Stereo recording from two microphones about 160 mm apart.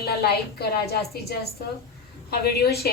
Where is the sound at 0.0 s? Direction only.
75° left (ahead or behind).